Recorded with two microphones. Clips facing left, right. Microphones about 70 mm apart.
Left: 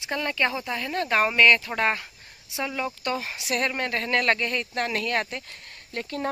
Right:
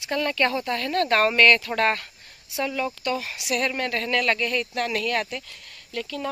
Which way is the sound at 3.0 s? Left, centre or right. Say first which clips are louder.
Right 1 dB; left.